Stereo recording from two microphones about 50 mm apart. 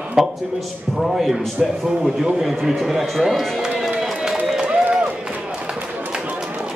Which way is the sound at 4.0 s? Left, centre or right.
Centre.